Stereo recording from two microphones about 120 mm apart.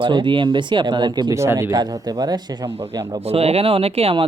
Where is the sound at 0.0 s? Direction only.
45° right (ahead or behind).